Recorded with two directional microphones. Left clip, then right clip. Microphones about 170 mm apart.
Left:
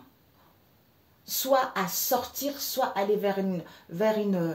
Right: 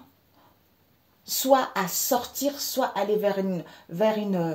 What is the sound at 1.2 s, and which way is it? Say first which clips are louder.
A woman's voice: right 3 dB; 45° right (ahead or behind).